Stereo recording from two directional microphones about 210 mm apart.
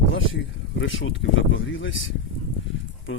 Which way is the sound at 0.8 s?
65° left (ahead or behind).